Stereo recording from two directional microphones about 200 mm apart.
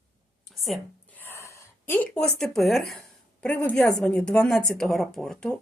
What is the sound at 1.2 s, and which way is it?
A woman's voice, 15° left (ahead or behind).